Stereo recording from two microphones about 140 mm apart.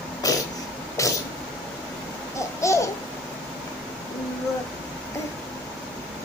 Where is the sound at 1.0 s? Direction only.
20° left (ahead or behind).